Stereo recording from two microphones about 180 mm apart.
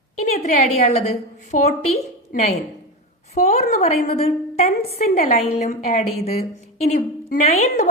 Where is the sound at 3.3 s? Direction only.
35° left (ahead or behind).